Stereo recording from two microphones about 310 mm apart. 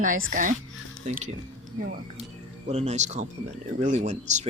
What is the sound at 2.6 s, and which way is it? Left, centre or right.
Speech, right.